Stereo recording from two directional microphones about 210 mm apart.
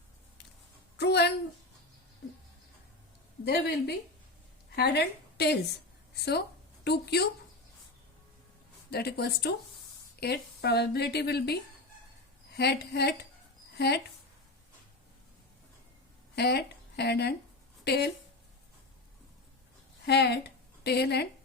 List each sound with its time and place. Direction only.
0.9 s a sound: 50° left (ahead or behind)
3.4 s a woman's voice: 50° left (ahead or behind)
8.9 s a woman's voice: 50° left (ahead or behind)
16.3 s a woman's voice: 50° left (ahead or behind)
20.1 s a woman's voice: 50° left (ahead or behind)